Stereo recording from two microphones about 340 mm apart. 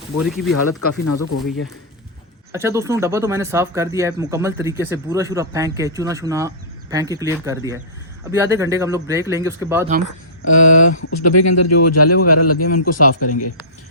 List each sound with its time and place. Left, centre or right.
0.3 s speech: centre
0.5 s speech: left
2.5 s speech: centre
10.4 s speech: left